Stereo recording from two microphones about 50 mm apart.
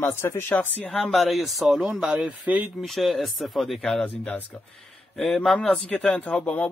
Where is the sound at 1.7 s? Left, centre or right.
Centre.